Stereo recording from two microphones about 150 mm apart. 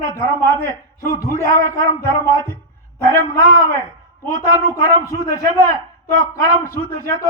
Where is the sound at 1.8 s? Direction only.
20° left (ahead or behind).